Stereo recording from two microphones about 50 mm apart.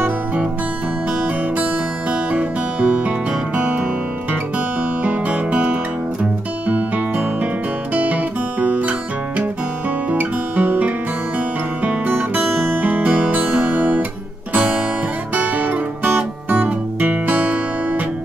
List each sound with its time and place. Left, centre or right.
2.3 s music: right
5.0 s music: right
7.9 s music: right
10.1 s music: right